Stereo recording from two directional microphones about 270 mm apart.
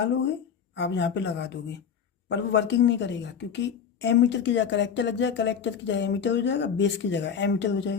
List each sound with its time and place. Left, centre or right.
0.8 s a woman's voice: left